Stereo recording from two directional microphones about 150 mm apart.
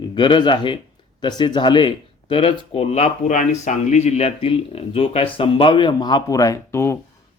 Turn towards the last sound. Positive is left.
turn(degrees=15)  # may be behind; listen again after turning